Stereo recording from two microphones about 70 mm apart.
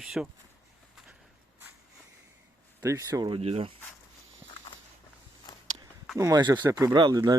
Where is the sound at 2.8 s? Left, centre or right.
Right.